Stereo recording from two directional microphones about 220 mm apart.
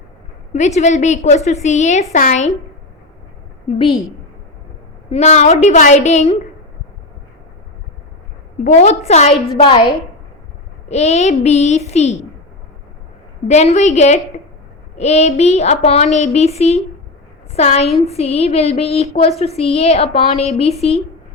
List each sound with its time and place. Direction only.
0.5 s a woman's voice: 30° left (ahead or behind)
5.1 s a woman's voice: 30° left (ahead or behind)
8.6 s a woman's voice: 30° left (ahead or behind)
9.6 s a sound: 25° left (ahead or behind)
13.5 s a woman's voice: 30° left (ahead or behind)
14.9 s a sound: 30° left (ahead or behind)